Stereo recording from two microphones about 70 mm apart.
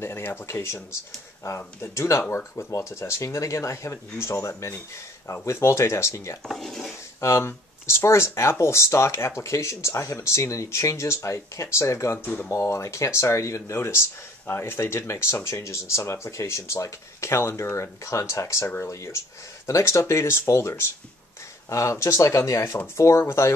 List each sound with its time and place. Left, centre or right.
0.0 s speech: left
6.4 s dishes: centre
7.2 s speech: left